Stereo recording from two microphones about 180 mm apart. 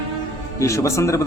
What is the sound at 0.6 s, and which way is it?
Speech, 15° left (ahead or behind).